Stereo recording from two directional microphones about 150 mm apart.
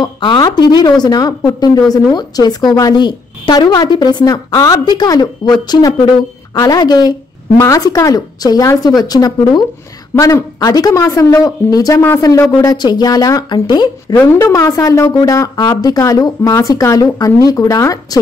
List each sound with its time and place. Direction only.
0.0 s a woman's voice: 30° left (ahead or behind)